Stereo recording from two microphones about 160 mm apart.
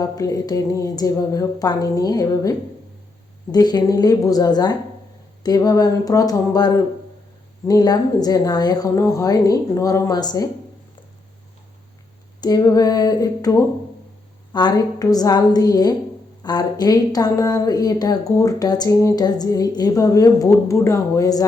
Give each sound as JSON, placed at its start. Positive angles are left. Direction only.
{"t": 0.0, "sound": "speech", "side_deg": 25}
{"t": 12.4, "sound": "speech", "side_deg": 25}